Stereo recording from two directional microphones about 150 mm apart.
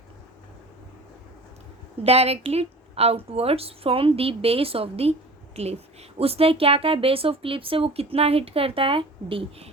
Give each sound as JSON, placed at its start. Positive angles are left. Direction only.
{"t": 2.0, "sound": "a woman's voice", "side_deg": -45}
{"t": 6.1, "sound": "speech", "side_deg": -40}